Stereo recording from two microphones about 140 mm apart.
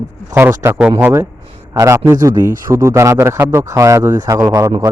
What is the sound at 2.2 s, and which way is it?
Speech, 25° right (ahead or behind).